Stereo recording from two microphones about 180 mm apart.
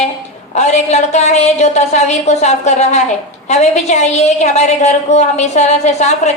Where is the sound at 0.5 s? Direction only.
40° left (ahead or behind).